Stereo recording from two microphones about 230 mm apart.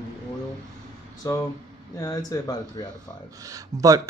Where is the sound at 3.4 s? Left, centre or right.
Centre.